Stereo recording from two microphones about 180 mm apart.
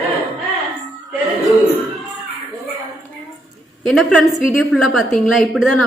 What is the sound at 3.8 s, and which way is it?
A woman's voice, centre (ahead or behind).